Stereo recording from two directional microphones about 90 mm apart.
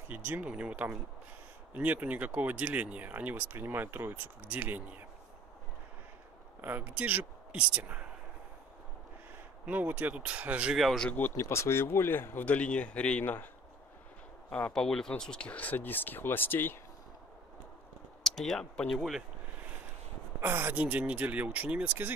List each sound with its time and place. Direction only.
0.1 s speech: 20° right (ahead or behind)
6.6 s speech: 20° right (ahead or behind)
9.7 s speech: 20° right (ahead or behind)
10.8 s speech: centre (ahead or behind)
11.1 s speech: 20° left (ahead or behind)
14.5 s speech: 10° left (ahead or behind)
18.2 s speech: 5° left (ahead or behind)
20.3 s speech: 25° right (ahead or behind)
20.8 s speech: 15° right (ahead or behind)